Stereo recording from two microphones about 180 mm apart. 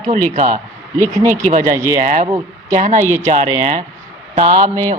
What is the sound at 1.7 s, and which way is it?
Mantra, 15° right (ahead or behind).